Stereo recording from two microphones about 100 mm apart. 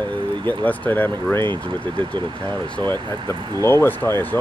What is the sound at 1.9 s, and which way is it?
Speech, 50° right (ahead or behind).